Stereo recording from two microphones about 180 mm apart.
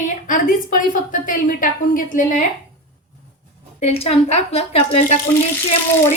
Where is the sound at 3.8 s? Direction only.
35° left (ahead or behind).